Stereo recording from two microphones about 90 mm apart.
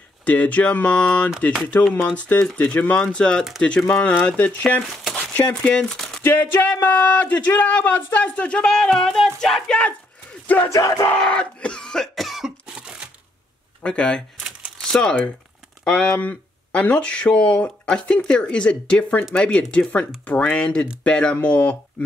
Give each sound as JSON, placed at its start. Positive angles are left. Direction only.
{"t": 0.2, "sound": "speech", "side_deg": 15}
{"t": 6.2, "sound": "speech", "side_deg": 20}
{"t": 10.4, "sound": "battle cry", "side_deg": 15}
{"t": 10.7, "sound": "battle cry", "side_deg": 45}
{"t": 11.1, "sound": "cough", "side_deg": 10}
{"t": 13.8, "sound": "speech", "side_deg": 10}